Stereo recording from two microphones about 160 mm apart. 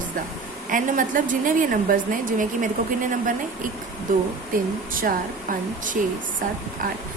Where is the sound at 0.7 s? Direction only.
55° right (ahead or behind).